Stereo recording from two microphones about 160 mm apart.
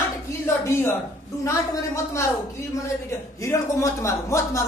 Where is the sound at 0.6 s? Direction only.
15° left (ahead or behind).